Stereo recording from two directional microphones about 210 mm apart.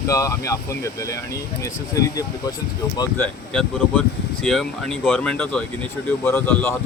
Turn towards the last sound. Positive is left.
turn(degrees=10)  # may be behind; listen again after turning